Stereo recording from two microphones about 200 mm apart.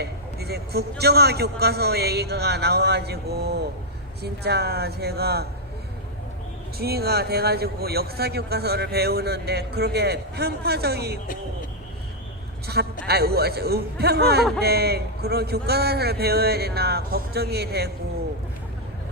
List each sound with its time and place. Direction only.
0.0 s a man's voice: 55° right (ahead or behind)
6.7 s a man's voice: 50° right (ahead or behind)
12.6 s a man's voice: 55° right (ahead or behind)